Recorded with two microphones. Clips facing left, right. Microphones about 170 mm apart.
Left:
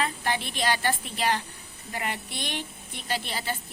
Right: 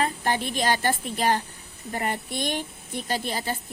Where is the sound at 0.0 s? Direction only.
45° right (ahead or behind).